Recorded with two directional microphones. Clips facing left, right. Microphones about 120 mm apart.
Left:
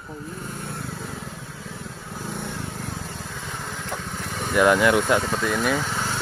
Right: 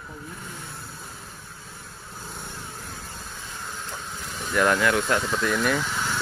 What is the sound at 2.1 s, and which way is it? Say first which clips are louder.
Vehicle: left 7 dB; 75° left (ahead or behind).